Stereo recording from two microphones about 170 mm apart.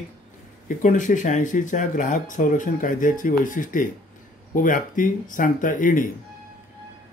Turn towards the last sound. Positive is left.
turn(degrees=50)  # may be behind; listen again after turning